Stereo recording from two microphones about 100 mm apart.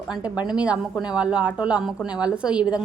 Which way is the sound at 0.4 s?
10° right (ahead or behind).